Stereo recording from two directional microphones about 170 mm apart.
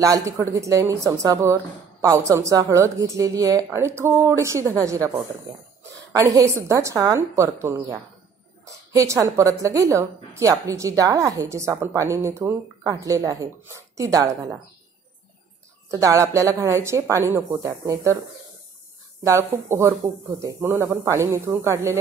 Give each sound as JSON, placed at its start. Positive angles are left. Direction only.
{"t": 0.0, "sound": "a woman's voice", "side_deg": -20}
{"t": 6.1, "sound": "a woman's voice", "side_deg": -15}
{"t": 15.9, "sound": "a woman's voice", "side_deg": -20}
{"t": 19.2, "sound": "a woman's voice", "side_deg": -15}